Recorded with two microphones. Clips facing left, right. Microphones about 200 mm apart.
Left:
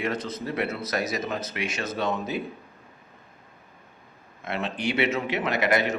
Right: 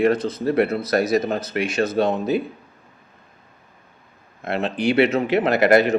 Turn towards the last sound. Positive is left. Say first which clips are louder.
# right 9 dB
turn(degrees=-35)  # may be behind; listen again after turning